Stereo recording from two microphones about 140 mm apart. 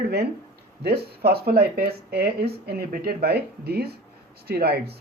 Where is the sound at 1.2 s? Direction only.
90° right.